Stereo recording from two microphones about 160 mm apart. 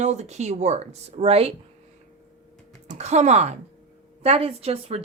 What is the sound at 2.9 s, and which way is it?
Speech, 45° right (ahead or behind).